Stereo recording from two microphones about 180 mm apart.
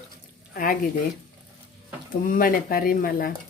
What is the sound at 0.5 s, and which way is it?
Speech, 50° left (ahead or behind).